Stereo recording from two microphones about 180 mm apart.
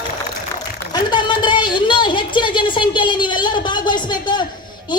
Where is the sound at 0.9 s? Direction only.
25° left (ahead or behind).